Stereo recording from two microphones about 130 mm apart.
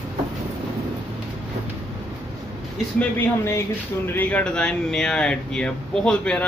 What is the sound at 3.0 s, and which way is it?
Speech, 20° left (ahead or behind).